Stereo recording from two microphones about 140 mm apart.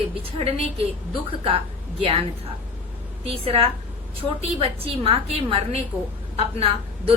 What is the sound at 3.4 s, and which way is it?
A woman's voice, 40° right (ahead or behind).